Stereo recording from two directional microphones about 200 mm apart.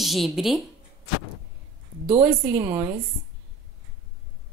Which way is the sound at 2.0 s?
5° right (ahead or behind).